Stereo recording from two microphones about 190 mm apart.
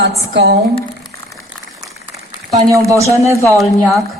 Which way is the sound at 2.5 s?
15° right (ahead or behind).